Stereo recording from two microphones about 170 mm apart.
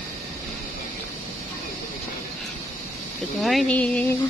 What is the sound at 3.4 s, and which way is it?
Speech, centre (ahead or behind).